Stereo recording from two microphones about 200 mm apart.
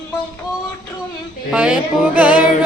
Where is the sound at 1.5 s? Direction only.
5° right (ahead or behind).